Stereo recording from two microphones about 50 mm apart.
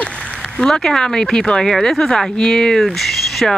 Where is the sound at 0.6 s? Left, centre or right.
Centre.